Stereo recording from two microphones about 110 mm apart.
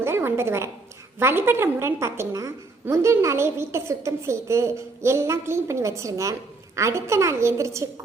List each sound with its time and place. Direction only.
0.0 s a woman's voice: 20° right (ahead or behind)